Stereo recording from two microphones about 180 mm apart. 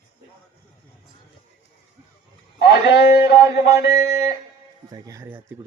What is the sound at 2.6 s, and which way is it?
A man's voice, 70° left (ahead or behind).